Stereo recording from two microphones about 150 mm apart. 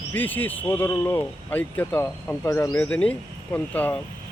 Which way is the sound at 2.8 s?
10° left (ahead or behind).